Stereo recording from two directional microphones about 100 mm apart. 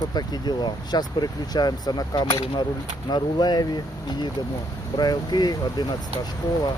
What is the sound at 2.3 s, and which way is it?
Speech, 65° left (ahead or behind).